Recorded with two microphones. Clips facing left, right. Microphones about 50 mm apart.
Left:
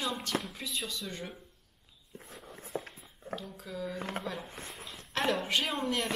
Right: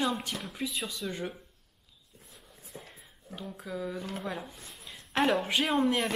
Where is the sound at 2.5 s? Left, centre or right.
Left.